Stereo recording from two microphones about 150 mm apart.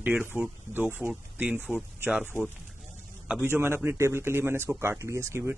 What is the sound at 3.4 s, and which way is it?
Speech, 15° right (ahead or behind).